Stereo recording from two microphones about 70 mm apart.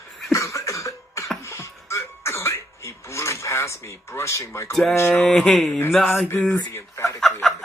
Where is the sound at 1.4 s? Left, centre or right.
Left.